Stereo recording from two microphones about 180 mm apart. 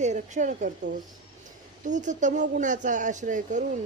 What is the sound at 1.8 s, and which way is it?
Speech, 45° right (ahead or behind).